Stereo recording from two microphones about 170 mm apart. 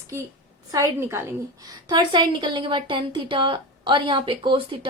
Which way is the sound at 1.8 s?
25° right (ahead or behind).